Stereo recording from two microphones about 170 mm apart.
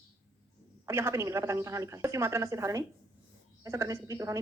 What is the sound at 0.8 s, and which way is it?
A woman's voice, 15° right (ahead or behind).